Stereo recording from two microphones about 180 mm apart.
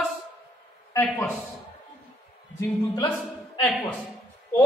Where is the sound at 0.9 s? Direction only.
10° left (ahead or behind).